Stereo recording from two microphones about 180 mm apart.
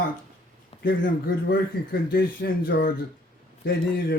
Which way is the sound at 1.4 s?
65° left (ahead or behind).